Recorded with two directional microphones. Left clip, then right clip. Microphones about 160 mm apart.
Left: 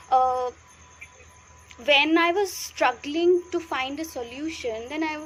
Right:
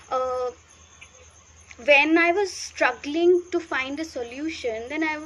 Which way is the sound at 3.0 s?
60° left (ahead or behind).